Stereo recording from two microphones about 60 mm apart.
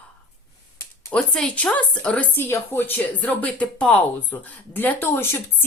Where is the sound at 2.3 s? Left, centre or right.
Left.